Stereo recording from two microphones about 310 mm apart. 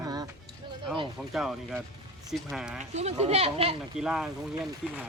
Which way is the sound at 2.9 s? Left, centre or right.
Right.